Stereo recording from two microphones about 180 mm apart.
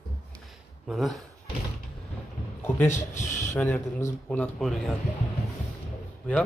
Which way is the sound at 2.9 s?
40° left (ahead or behind).